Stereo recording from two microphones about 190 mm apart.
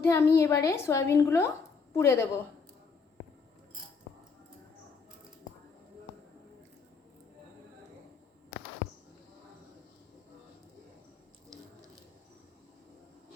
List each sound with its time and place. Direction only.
0.0 s a woman's voice: 15° left (ahead or behind)